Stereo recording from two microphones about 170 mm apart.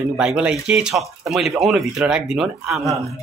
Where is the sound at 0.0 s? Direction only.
Centre (ahead or behind).